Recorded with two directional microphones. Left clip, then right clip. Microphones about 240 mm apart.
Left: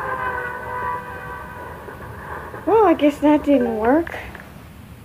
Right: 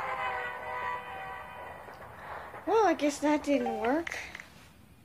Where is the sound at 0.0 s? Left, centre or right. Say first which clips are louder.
Left 9 dB; right.